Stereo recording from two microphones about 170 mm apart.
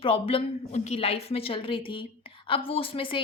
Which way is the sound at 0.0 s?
30° left (ahead or behind).